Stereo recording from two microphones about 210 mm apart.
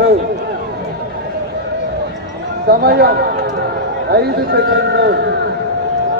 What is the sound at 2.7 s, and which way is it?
A man's voice, 50° right (ahead or behind).